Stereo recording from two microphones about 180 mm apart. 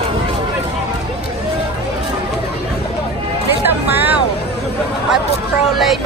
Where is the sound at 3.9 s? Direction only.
10° right (ahead or behind).